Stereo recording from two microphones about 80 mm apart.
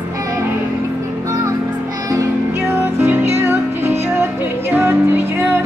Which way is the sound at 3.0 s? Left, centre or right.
Right.